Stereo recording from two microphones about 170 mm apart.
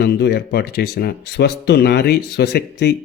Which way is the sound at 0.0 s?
70° left (ahead or behind).